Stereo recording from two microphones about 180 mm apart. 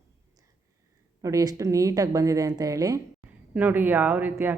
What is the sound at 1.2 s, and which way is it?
A woman's voice, 20° right (ahead or behind).